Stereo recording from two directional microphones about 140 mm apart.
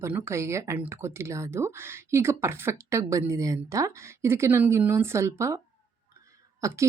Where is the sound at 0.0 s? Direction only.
15° right (ahead or behind).